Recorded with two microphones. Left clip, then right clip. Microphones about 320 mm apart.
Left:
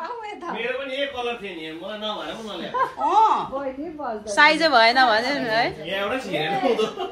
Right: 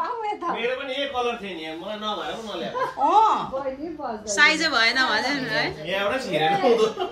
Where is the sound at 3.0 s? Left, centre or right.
Centre.